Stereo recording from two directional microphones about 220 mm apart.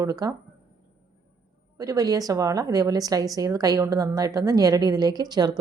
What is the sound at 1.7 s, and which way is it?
A woman's voice, 15° right (ahead or behind).